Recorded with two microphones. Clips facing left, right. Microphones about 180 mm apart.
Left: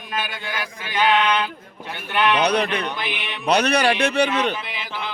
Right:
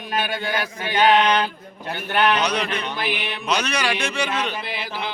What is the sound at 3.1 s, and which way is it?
Speech, 35° right (ahead or behind).